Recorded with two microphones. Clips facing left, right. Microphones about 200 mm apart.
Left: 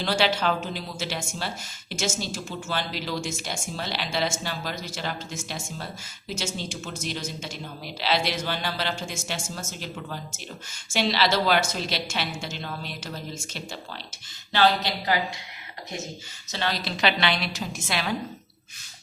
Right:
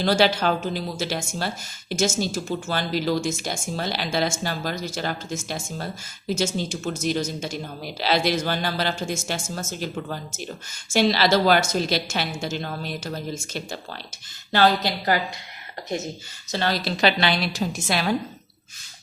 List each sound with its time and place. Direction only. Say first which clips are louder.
0.0 s speech: right 4 dB; 40° right (ahead or behind)
16.5 s a woman's voice: right 5 dB; 40° right (ahead or behind)